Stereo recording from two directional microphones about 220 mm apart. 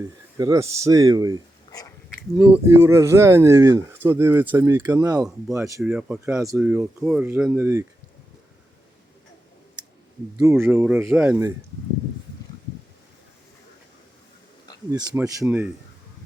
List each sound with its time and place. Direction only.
0.3 s speech: 15° right (ahead or behind)
2.3 s speech: 5° right (ahead or behind)
10.3 s speech: 10° right (ahead or behind)
14.8 s speech: 15° right (ahead or behind)